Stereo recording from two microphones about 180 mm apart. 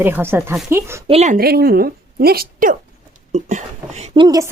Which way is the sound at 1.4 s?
60° right (ahead or behind).